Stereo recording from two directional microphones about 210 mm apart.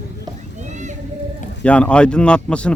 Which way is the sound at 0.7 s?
35° right (ahead or behind).